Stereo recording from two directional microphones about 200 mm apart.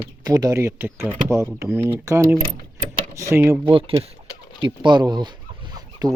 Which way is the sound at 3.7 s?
30° right (ahead or behind).